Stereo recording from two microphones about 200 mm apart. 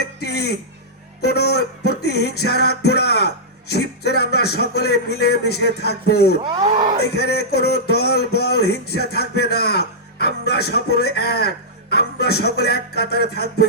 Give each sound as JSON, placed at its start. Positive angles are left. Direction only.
{"t": 0.0, "sound": "a sound", "side_deg": 55}
{"t": 1.2, "sound": "speech", "side_deg": 55}
{"t": 6.4, "sound": "speech", "side_deg": -25}
{"t": 7.2, "sound": "speech", "side_deg": 55}